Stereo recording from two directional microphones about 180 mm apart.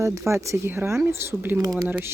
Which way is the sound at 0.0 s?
15° right (ahead or behind).